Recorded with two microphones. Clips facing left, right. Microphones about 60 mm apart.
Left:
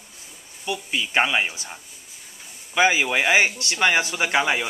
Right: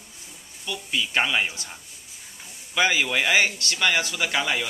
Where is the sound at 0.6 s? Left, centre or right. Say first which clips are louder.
Left 2 dB; centre.